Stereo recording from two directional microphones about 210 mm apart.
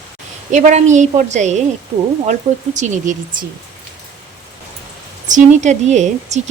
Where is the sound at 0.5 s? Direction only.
35° right (ahead or behind).